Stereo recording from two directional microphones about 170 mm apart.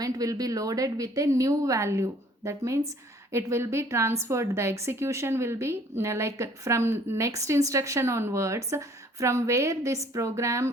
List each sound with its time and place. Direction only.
0.0 s a woman's voice: 20° right (ahead or behind)